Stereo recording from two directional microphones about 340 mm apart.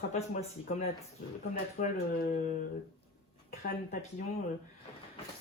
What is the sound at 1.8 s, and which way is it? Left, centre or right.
Speech, left.